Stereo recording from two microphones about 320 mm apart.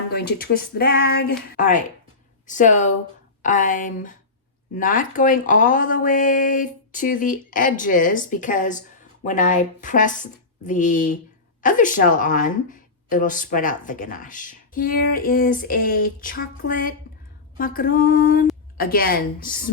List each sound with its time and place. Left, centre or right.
0.1 s speech: left